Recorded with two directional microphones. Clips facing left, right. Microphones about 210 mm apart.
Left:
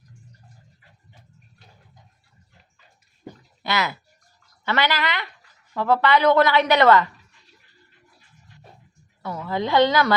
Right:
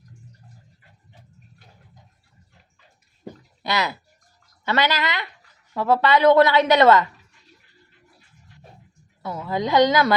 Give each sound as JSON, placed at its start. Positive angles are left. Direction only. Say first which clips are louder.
{"t": 3.6, "sound": "a woman's voice", "louder": "right 1 dB", "side_deg": -20}
{"t": 9.2, "sound": "a woman's voice", "louder": "right 1 dB", "side_deg": -20}